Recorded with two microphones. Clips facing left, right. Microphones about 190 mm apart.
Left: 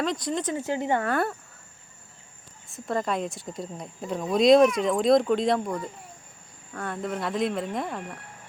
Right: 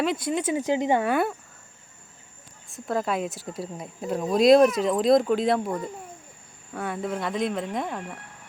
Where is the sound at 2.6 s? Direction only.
Centre (ahead or behind).